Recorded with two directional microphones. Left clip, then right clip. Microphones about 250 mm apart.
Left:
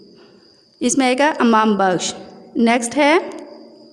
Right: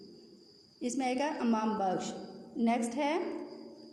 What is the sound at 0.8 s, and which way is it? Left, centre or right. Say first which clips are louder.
A woman's voice: left 17 dB; left.